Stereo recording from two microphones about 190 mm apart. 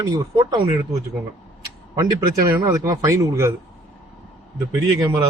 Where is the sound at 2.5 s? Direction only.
20° right (ahead or behind).